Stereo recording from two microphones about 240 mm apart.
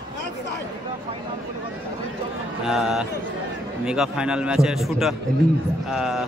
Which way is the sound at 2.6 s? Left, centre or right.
Centre.